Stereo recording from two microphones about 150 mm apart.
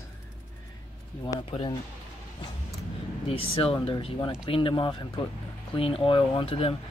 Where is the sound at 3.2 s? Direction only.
40° left (ahead or behind).